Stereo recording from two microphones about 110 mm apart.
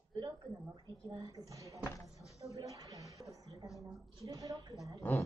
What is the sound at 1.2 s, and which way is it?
Speech, 30° right (ahead or behind).